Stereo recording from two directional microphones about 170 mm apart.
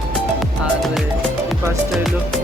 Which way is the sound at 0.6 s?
Centre (ahead or behind).